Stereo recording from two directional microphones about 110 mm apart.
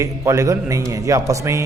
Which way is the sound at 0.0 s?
30° right (ahead or behind).